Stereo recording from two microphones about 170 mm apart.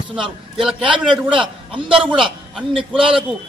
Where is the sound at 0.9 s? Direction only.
30° right (ahead or behind).